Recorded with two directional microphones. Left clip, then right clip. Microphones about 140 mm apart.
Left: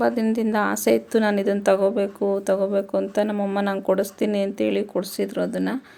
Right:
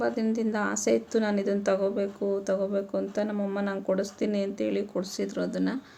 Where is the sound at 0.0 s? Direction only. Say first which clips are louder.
Left 6 dB; 25° left (ahead or behind).